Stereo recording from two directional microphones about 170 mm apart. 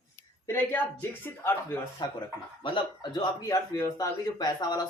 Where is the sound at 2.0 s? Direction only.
25° left (ahead or behind).